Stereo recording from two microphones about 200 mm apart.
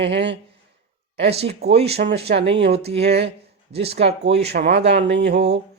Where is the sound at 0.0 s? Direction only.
60° right (ahead or behind).